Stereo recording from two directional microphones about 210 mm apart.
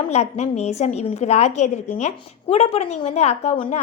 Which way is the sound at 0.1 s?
30° left (ahead or behind).